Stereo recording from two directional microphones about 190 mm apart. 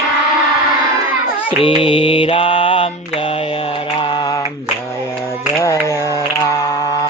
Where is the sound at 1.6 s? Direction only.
30° left (ahead or behind).